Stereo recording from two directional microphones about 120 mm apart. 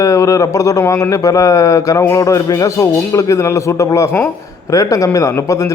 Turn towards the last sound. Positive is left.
turn(degrees=25)  # may be behind; listen again after turning